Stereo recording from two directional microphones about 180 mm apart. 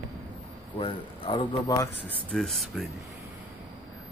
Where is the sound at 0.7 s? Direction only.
30° left (ahead or behind).